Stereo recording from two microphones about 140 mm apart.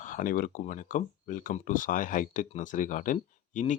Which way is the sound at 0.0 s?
70° left (ahead or behind).